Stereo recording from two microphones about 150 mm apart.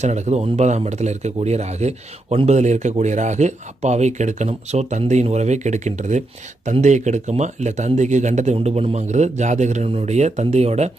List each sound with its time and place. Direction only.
0.0 s speech: 50° right (ahead or behind)
8.5 s speech: 40° right (ahead or behind)